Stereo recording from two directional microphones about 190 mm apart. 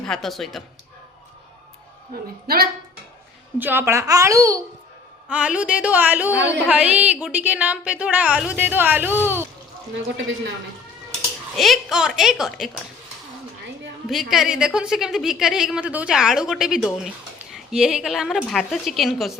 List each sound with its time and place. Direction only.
0.0 s a woman's voice: centre (ahead or behind)
3.6 s a woman's voice: 10° right (ahead or behind)
5.3 s a woman's voice: 5° right (ahead or behind)
9.9 s speech: 75° right (ahead or behind)
11.5 s a woman's voice: centre (ahead or behind)
14.1 s a woman's voice: centre (ahead or behind)